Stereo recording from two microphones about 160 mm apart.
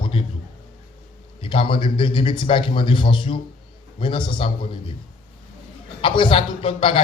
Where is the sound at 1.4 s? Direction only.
35° left (ahead or behind).